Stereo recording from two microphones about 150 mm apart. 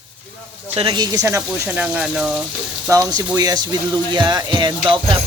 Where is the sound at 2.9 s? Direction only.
25° right (ahead or behind).